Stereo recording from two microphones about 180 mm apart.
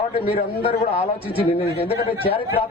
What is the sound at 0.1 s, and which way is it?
A man's voice, 30° left (ahead or behind).